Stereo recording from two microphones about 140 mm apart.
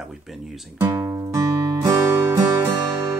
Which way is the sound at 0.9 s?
25° right (ahead or behind).